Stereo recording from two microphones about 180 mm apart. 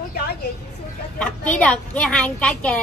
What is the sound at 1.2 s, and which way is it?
A child's voice, 5° left (ahead or behind).